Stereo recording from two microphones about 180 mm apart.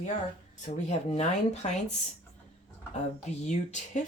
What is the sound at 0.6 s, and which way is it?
Speech, 40° left (ahead or behind).